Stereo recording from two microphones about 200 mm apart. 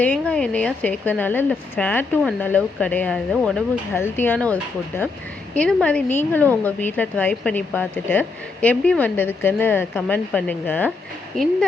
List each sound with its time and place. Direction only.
0.0 s speech: 5° left (ahead or behind)